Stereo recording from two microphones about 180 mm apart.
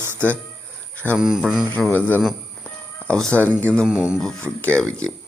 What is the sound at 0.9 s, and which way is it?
Speech, 10° left (ahead or behind).